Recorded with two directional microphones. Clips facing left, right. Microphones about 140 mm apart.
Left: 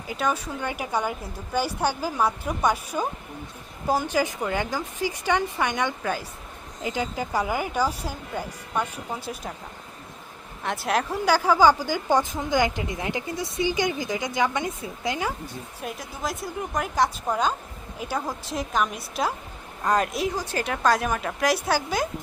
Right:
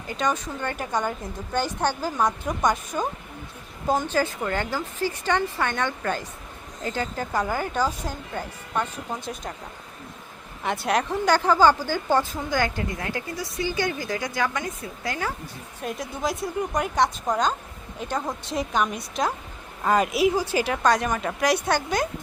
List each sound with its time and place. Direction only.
0.1 s a woman's voice: 5° left (ahead or behind)
10.6 s a woman's voice: centre (ahead or behind); by 15.3 s 20° left (ahead or behind)
15.8 s a woman's voice: centre (ahead or behind)